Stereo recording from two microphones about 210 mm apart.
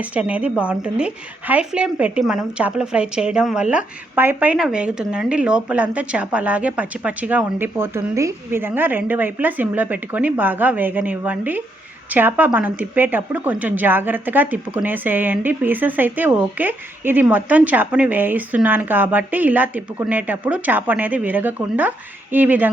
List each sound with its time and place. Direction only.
0.0 s speech: 5° right (ahead or behind)